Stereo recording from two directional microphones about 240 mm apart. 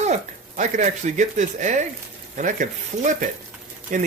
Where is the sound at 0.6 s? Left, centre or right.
Right.